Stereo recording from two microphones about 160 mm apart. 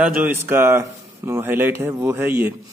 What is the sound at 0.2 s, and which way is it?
Speech, 15° right (ahead or behind).